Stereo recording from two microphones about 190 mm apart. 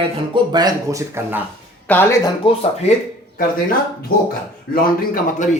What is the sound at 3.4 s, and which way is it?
Speech, 50° left (ahead or behind).